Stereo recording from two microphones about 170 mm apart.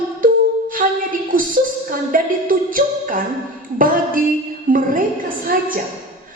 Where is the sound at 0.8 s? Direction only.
50° right (ahead or behind).